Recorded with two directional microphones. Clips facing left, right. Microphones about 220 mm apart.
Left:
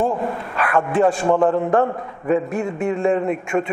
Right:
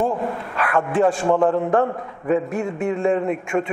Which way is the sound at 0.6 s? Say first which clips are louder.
Left 1 dB; 20° left (ahead or behind).